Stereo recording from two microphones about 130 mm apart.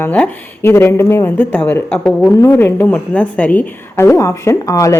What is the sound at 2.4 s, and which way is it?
A woman's voice, 20° left (ahead or behind).